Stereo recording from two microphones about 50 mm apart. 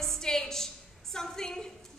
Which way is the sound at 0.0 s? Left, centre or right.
Centre.